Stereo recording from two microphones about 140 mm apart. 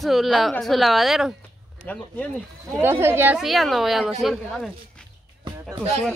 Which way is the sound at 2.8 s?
15° right (ahead or behind).